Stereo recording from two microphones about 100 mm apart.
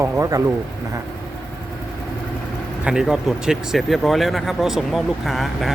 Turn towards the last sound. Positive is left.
turn(degrees=0)  # may be behind; listen again after turning